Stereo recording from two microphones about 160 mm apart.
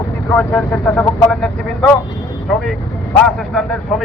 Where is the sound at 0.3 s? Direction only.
10° left (ahead or behind).